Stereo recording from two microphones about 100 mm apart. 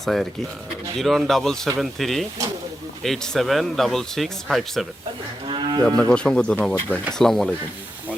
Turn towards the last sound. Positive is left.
turn(degrees=5)  # may be behind; listen again after turning